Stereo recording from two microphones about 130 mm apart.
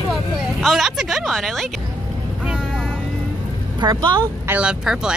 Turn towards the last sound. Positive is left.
turn(degrees=-5)  # may be behind; listen again after turning